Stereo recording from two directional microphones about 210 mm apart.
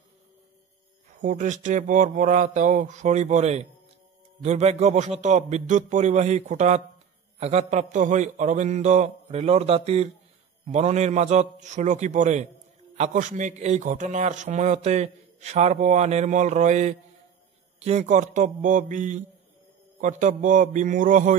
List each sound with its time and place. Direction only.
1.2 s a man's voice: 35° right (ahead or behind)